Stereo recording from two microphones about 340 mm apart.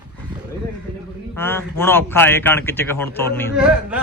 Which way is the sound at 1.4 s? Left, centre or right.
Centre.